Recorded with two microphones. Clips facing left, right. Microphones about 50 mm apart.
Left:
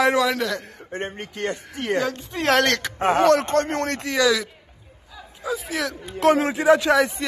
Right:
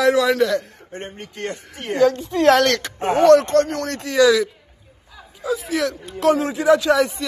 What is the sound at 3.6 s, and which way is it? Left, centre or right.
Speech, left.